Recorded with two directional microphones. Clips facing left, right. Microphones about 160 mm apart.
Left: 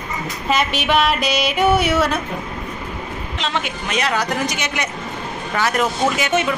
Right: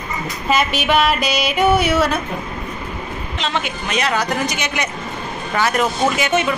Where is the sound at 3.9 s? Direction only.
Centre (ahead or behind).